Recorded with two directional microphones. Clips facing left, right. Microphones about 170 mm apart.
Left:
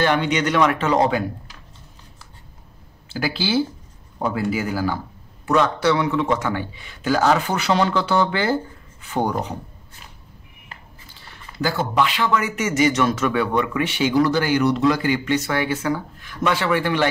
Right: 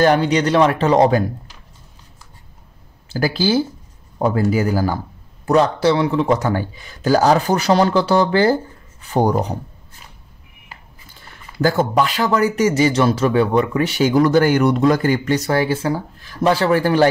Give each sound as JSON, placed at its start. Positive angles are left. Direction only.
{"t": 0.0, "sound": "speech", "side_deg": -35}
{"t": 3.1, "sound": "speech", "side_deg": -40}
{"t": 11.1, "sound": "speech", "side_deg": -45}